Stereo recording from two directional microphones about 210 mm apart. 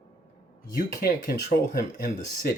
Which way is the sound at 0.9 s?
50° left (ahead or behind).